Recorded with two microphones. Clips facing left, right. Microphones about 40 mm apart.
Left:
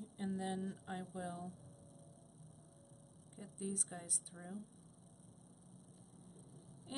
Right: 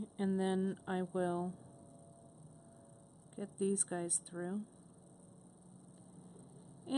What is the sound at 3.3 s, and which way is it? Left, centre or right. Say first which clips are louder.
A woman's voice: right 9 dB; right.